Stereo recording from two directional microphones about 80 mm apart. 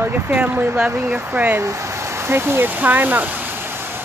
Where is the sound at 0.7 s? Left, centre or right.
Centre.